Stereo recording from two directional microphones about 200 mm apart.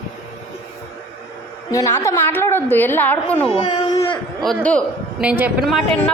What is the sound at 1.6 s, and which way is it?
A woman's voice, 15° left (ahead or behind).